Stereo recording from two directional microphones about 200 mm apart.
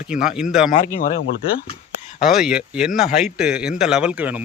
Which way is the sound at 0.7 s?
40° left (ahead or behind).